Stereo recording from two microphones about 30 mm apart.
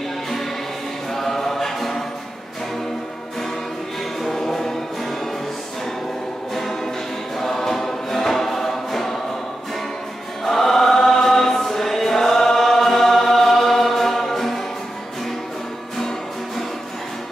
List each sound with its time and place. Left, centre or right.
1.1 s choir: centre
4.2 s music: centre
7.3 s choir: centre
10.4 s choir: centre